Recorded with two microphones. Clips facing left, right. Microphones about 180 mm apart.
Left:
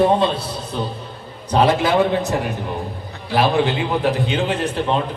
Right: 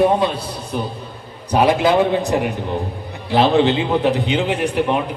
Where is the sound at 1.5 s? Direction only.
10° right (ahead or behind).